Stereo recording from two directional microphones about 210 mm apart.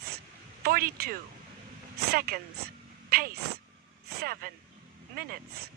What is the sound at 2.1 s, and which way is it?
A woman's voice, 45° right (ahead or behind).